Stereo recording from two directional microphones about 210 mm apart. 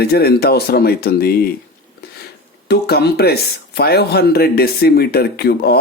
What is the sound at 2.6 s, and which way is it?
Speech, 50° left (ahead or behind).